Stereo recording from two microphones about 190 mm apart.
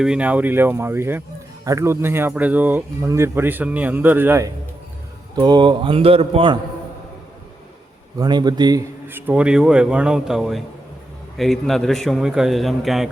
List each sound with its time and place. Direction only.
0.0 s speech: 5° right (ahead or behind)
5.4 s a man's voice: 25° right (ahead or behind)
8.2 s a man's voice: 20° right (ahead or behind)
9.0 s a man's voice: 10° right (ahead or behind)